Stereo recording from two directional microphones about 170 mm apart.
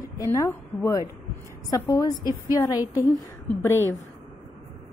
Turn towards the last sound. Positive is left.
turn(degrees=15)  # may be behind; listen again after turning